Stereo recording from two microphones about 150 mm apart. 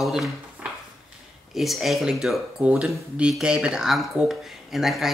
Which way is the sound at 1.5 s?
Centre (ahead or behind).